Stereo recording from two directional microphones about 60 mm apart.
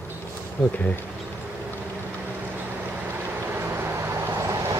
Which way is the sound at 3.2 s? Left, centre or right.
Right.